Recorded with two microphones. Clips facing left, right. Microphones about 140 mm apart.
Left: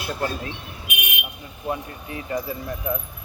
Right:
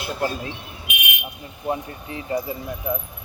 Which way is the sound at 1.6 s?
25° right (ahead or behind).